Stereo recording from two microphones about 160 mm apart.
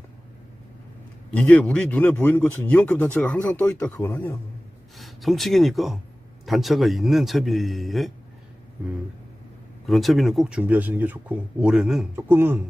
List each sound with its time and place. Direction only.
1.3 s speech: 10° left (ahead or behind)
4.9 s a man's voice: centre (ahead or behind)
9.8 s a man's voice: centre (ahead or behind)